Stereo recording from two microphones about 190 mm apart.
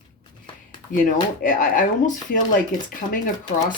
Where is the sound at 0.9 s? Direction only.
45° left (ahead or behind).